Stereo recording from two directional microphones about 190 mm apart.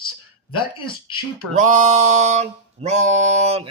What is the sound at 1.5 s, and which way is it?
Speech, 40° right (ahead or behind).